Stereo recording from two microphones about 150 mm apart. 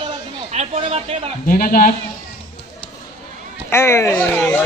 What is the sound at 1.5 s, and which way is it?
Speech, 70° left (ahead or behind).